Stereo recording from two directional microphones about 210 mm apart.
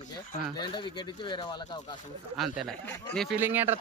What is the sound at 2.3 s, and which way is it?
Speech, centre (ahead or behind).